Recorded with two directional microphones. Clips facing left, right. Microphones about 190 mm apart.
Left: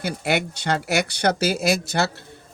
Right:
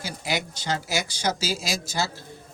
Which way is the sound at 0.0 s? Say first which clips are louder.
Left 6 dB; 60° left (ahead or behind).